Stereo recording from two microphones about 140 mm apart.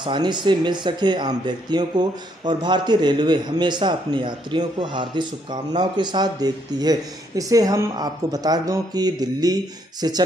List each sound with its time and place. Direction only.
0.0 s speech: 35° right (ahead or behind)